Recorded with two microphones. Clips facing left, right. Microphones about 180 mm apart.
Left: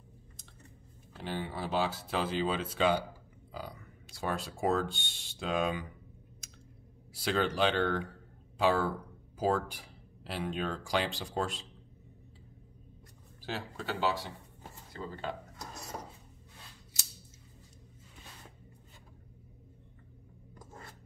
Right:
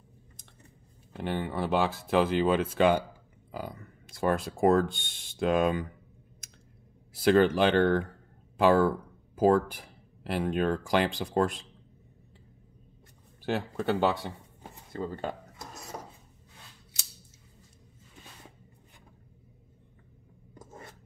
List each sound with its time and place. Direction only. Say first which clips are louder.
1.1 s speech: right 6 dB; 60° right (ahead or behind)
7.2 s speech: right 8 dB; 50° right (ahead or behind)
13.4 s speech: right 8 dB; 55° right (ahead or behind)
20.5 s a sound: right 4 dB; 20° right (ahead or behind)